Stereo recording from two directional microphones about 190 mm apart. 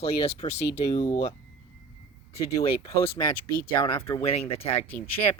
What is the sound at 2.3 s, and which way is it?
Speech, 15° left (ahead or behind).